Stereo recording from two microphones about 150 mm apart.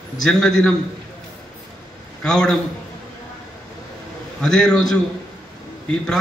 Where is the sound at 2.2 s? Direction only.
5° left (ahead or behind).